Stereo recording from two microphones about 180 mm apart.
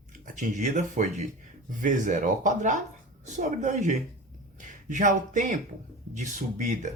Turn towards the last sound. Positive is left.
turn(degrees=-45)  # may be behind; listen again after turning